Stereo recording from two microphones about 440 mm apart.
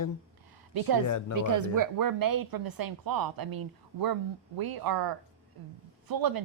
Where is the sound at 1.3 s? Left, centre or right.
Right.